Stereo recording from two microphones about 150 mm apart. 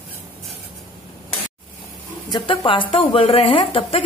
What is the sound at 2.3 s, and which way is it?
A woman's voice, 35° left (ahead or behind).